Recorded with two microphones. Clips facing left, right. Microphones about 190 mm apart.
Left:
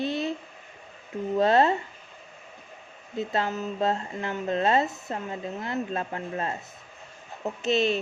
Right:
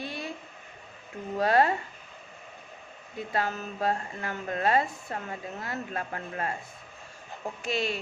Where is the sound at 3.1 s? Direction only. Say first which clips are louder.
Left 3 dB; 25° left (ahead or behind).